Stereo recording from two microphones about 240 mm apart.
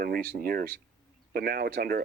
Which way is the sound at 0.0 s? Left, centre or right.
Right.